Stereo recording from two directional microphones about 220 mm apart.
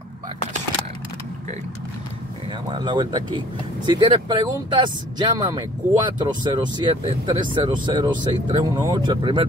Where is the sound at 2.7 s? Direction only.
20° right (ahead or behind).